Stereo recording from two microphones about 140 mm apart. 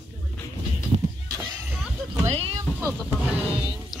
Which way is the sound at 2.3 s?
45° right (ahead or behind).